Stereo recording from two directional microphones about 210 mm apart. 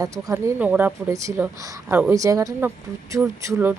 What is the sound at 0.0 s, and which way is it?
Speech, 15° right (ahead or behind).